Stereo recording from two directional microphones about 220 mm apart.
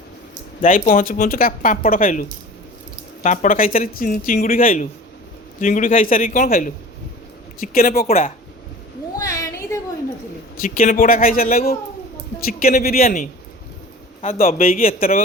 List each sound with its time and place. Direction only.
0.6 s speech: 40° left (ahead or behind)
3.2 s speech: 35° left (ahead or behind)
8.0 s speech: 30° left (ahead or behind)
9.1 s a sound: 15° left (ahead or behind)
10.6 s speech: 40° left (ahead or behind)
14.3 s speech: 40° left (ahead or behind)